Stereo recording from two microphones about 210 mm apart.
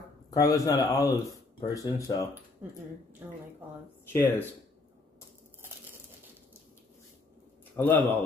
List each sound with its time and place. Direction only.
0.4 s speech: 15° left (ahead or behind)
4.1 s speech: 10° left (ahead or behind)
7.7 s speech: 10° left (ahead or behind)